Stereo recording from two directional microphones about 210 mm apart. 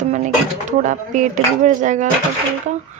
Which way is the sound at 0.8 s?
35° right (ahead or behind).